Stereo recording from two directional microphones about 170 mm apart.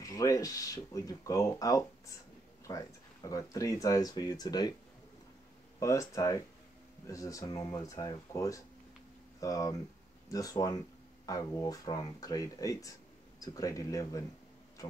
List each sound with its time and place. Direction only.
0.0 s speech: 20° left (ahead or behind)
5.8 s speech: 20° left (ahead or behind)